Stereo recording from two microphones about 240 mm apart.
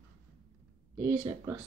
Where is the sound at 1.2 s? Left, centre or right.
Centre.